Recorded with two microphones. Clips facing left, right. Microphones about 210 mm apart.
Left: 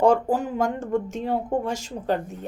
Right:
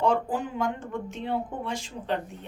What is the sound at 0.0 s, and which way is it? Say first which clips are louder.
Speech: left 6 dB; 45° left (ahead or behind).